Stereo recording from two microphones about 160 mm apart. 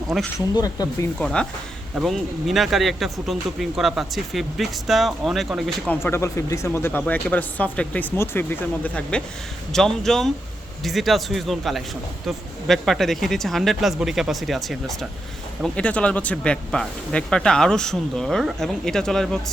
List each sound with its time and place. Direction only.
0.3 s speech: 25° left (ahead or behind)
1.2 s speech: 5° left (ahead or behind)
6.0 s speech: 15° left (ahead or behind)